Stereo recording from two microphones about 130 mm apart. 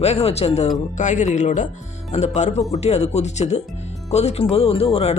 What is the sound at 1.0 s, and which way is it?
Speech, 70° left (ahead or behind).